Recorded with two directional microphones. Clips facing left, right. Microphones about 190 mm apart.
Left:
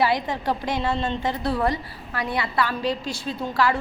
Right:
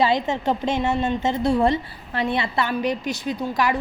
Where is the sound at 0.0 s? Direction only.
20° right (ahead or behind).